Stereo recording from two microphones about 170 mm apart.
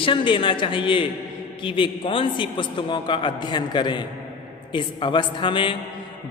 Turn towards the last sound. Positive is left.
turn(degrees=30)  # may be behind; listen again after turning